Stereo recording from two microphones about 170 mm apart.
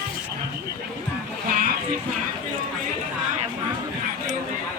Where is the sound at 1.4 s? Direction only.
55° right (ahead or behind).